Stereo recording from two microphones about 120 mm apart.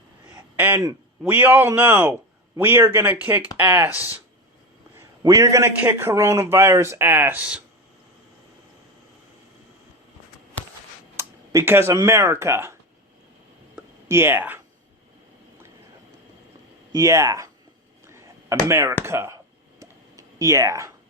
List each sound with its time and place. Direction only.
0.5 s a man's voice: 15° right (ahead or behind)
5.2 s a man's voice: 30° right (ahead or behind); by 7.6 s 10° right (ahead or behind)
11.2 s speech: 20° right (ahead or behind)
13.7 s a sound: 20° right (ahead or behind)
16.9 s a man's voice: 25° right (ahead or behind)
18.0 s a sound: 25° right (ahead or behind)
19.0 s a man's voice: 20° right (ahead or behind)
19.8 s tick-tock: 25° right (ahead or behind)